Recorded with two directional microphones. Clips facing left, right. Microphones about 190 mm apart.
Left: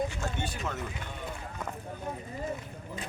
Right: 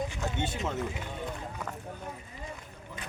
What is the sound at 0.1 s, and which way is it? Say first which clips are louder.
Speech: right 2 dB; 15° right (ahead or behind).